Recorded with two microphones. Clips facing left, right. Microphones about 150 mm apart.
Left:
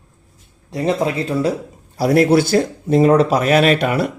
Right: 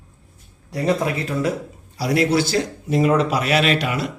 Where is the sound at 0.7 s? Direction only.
25° left (ahead or behind).